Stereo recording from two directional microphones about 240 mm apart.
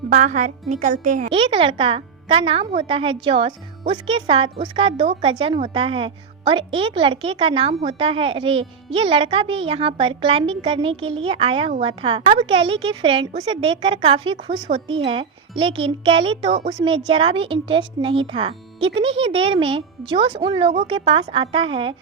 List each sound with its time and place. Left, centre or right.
0.1 s speech: right